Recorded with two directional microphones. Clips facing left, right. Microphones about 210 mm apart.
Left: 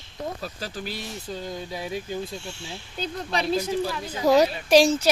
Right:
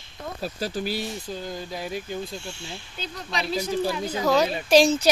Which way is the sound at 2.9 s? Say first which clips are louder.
Left 7 dB; 50° left (ahead or behind).